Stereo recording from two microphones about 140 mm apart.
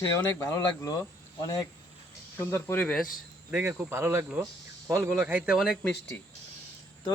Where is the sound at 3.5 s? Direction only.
10° right (ahead or behind); by 6.2 s 5° left (ahead or behind).